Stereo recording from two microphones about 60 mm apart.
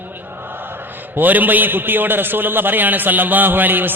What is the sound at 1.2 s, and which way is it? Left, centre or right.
A man's voice, right.